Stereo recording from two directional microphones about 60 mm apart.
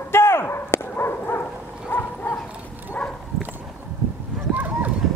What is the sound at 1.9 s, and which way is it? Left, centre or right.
Dog, left.